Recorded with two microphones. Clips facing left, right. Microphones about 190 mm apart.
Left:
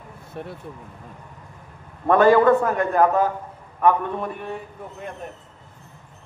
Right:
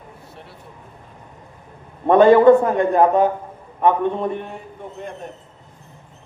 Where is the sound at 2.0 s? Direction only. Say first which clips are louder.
Right 5 dB; 20° right (ahead or behind).